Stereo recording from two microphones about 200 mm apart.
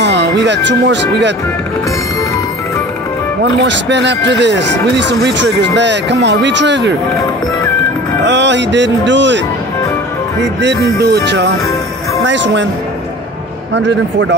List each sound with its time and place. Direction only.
0.0 s speech: 60° right (ahead or behind)
3.4 s speech: 60° right (ahead or behind)
8.2 s speech: 60° right (ahead or behind)
10.4 s speech: 60° right (ahead or behind)
11.0 s music: 55° right (ahead or behind)
12.3 s speech: 65° right (ahead or behind)
13.7 s speech: 65° right (ahead or behind)